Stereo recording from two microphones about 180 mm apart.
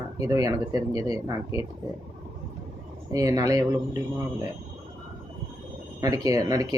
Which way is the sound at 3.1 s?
20° right (ahead or behind).